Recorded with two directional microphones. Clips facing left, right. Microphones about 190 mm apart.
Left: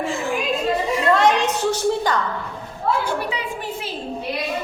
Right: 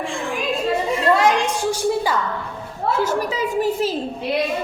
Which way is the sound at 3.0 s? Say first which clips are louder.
Right 4 dB; 40° right (ahead or behind).